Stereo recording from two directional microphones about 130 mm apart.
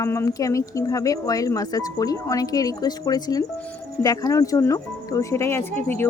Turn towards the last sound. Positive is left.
turn(degrees=15)  # may be behind; listen again after turning